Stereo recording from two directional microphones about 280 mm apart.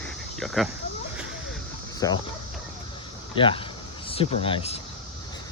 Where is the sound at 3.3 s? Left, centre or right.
Centre.